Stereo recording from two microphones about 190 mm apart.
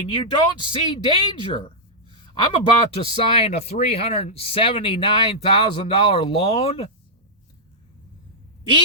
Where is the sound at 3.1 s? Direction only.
30° left (ahead or behind).